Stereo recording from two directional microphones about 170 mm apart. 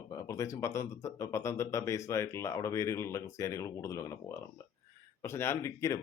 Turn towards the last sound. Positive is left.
turn(degrees=15)  # may be behind; listen again after turning